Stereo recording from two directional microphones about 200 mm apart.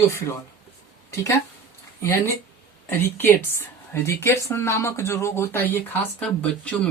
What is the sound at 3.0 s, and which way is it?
Speech, 10° left (ahead or behind).